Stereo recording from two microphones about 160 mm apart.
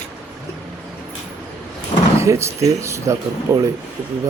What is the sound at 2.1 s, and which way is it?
Speech, 20° right (ahead or behind).